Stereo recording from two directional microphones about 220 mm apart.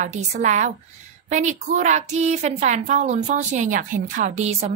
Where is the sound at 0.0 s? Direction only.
35° right (ahead or behind).